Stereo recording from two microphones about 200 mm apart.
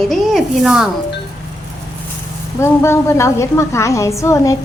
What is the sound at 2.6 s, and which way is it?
A woman's voice, 15° left (ahead or behind).